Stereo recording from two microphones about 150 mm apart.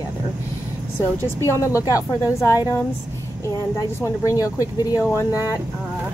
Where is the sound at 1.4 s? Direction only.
20° left (ahead or behind).